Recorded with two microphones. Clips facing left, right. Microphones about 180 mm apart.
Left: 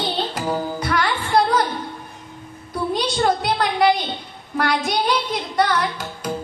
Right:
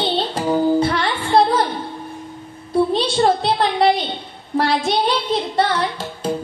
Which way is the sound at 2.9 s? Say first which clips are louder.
Right 3 dB; 25° right (ahead or behind).